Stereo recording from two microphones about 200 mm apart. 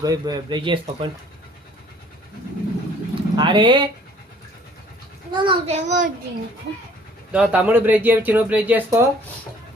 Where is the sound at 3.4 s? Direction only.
25° right (ahead or behind).